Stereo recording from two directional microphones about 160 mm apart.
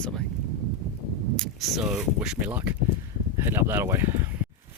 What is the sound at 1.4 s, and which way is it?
Speech, centre (ahead or behind).